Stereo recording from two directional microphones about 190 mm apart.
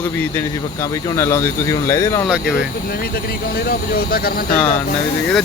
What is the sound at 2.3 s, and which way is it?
Speech, 5° right (ahead or behind).